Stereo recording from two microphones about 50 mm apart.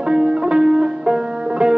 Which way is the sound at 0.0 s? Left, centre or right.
Centre.